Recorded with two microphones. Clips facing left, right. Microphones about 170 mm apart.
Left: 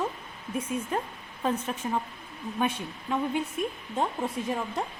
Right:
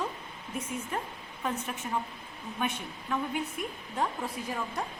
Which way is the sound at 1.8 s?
30° left (ahead or behind).